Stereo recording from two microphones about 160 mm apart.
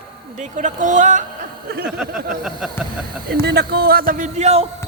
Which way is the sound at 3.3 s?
85° right.